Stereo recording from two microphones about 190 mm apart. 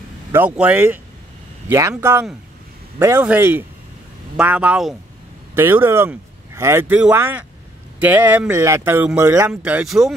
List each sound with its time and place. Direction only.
0.3 s speech: 10° right (ahead or behind)